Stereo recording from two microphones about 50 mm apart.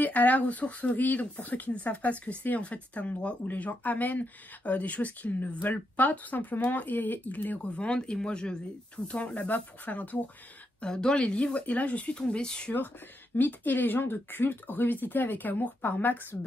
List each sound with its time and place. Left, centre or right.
0.0 s speech: left
10.8 s speech: centre
12.2 s speech: centre
13.4 s speech: left